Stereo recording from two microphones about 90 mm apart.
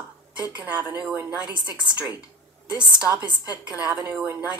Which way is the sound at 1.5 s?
55° right (ahead or behind).